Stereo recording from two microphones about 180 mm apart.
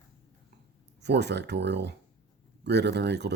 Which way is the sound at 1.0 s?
70° right (ahead or behind).